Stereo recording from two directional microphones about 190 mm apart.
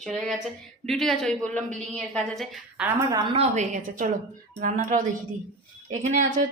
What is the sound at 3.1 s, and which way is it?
A woman's voice, 25° right (ahead or behind).